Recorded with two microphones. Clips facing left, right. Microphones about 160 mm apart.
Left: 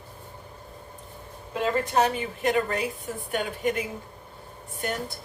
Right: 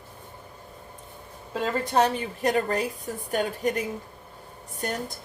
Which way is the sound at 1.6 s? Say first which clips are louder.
Even; 40° right (ahead or behind).